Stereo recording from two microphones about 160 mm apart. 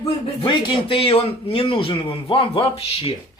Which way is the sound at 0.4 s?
30° left (ahead or behind).